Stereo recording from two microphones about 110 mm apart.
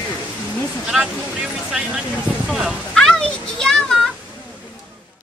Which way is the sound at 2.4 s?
5° right (ahead or behind).